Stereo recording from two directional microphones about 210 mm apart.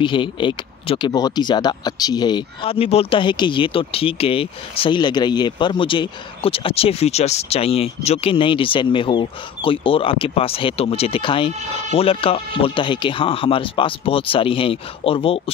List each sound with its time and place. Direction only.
0.0 s speech: 25° left (ahead or behind)